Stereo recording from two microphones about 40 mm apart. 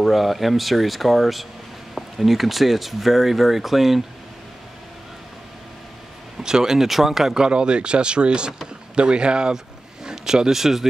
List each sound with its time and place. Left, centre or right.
0.0 s speech: centre
6.4 s speech: centre
7.4 s speech: right